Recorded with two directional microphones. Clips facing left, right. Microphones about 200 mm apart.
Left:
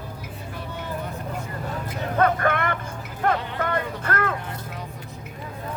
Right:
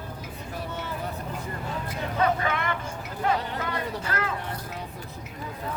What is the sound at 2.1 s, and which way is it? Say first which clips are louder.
Vehicle: left 4 dB; 55° left (ahead or behind).